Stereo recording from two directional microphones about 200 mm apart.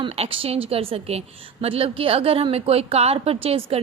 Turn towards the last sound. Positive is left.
turn(degrees=-30)  # may be behind; listen again after turning